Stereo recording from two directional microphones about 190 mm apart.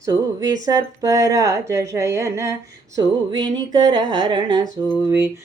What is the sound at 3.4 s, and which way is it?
Speech, 20° right (ahead or behind).